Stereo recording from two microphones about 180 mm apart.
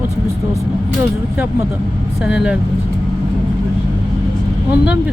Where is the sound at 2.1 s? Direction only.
5° right (ahead or behind).